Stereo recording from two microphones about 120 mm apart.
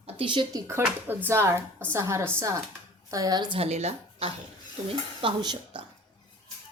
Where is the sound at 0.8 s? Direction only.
15° right (ahead or behind); by 3.5 s 35° right (ahead or behind).